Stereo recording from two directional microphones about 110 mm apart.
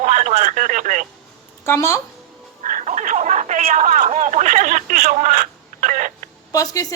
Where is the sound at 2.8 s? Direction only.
90° right.